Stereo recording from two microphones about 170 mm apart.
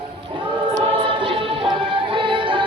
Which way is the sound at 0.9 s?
30° right (ahead or behind).